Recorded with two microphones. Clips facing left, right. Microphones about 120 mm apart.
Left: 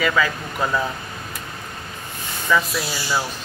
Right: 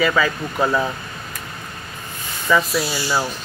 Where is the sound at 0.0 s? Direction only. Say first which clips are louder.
Right 2 dB; 10° right (ahead or behind).